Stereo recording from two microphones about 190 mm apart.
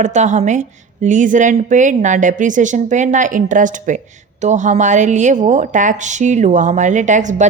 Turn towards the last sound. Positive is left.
turn(degrees=-40)  # may be behind; listen again after turning